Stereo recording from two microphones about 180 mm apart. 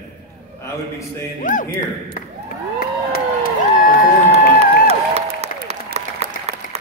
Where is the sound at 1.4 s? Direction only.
45° left (ahead or behind).